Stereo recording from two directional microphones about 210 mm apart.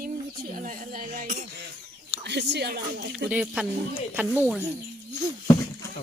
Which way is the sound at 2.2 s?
55° right (ahead or behind).